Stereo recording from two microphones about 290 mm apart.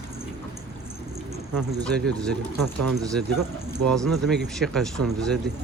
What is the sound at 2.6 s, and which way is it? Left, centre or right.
Speech, right.